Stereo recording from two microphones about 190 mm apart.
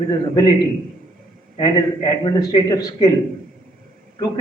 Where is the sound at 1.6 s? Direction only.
20° left (ahead or behind).